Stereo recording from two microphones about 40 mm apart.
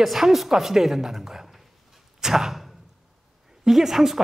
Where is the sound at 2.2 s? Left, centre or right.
Centre.